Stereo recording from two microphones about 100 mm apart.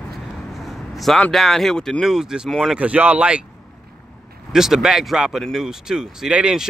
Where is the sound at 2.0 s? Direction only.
5° right (ahead or behind).